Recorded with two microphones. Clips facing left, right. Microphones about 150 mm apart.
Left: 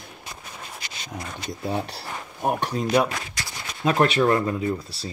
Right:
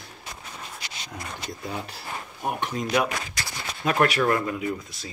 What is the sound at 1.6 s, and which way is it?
Speech, 30° left (ahead or behind).